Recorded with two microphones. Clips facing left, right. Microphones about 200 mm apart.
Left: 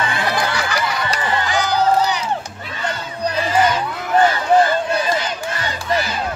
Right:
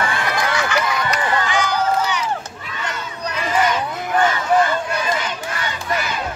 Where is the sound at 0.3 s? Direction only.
35° left (ahead or behind).